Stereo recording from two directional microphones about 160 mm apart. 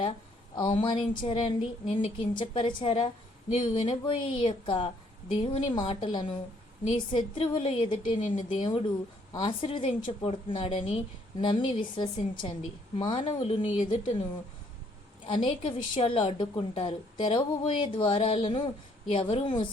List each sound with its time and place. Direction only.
0.5 s a woman's voice: 30° left (ahead or behind)
15.3 s a woman's voice: 35° left (ahead or behind)